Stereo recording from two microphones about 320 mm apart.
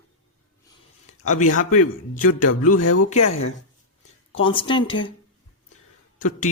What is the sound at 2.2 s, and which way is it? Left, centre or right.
Speech, left.